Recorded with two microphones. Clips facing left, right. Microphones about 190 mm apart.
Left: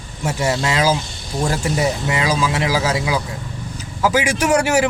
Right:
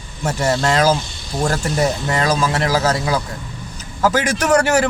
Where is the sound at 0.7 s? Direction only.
50° right (ahead or behind).